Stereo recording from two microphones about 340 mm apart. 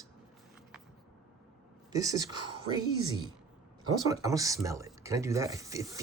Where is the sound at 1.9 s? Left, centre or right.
Centre.